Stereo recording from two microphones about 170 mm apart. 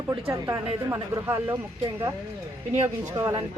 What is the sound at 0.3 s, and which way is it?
A woman's voice, 15° right (ahead or behind).